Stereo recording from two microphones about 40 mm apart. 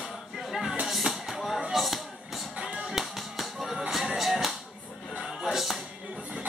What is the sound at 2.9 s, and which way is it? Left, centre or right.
Music, centre.